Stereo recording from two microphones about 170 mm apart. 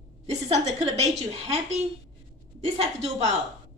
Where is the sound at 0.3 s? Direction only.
40° right (ahead or behind).